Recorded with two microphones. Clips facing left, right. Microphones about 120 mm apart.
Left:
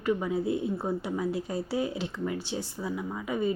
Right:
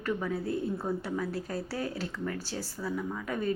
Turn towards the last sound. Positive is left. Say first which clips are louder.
# left 2 dB
turn(degrees=10)  # may be behind; listen again after turning